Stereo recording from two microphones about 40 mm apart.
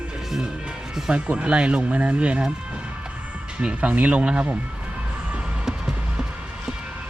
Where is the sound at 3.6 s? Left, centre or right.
Right.